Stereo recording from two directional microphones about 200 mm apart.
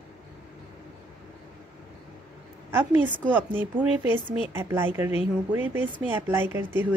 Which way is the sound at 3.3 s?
10° right (ahead or behind).